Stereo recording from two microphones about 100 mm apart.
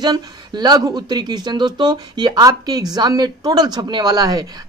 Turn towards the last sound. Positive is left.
turn(degrees=-40)  # may be behind; listen again after turning